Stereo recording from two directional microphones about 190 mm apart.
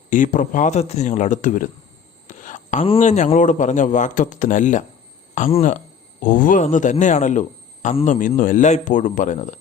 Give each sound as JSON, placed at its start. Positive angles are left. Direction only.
{"t": 0.1, "sound": "a man's voice", "side_deg": 45}